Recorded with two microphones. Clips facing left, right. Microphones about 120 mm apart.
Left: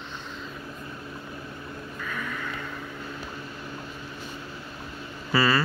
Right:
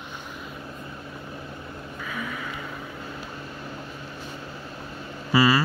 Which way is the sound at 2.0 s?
10° right (ahead or behind).